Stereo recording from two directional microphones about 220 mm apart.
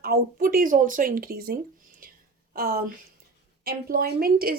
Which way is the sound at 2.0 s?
40° right (ahead or behind).